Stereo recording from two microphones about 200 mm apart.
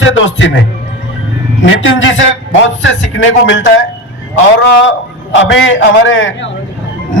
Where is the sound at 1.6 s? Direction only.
70° left (ahead or behind).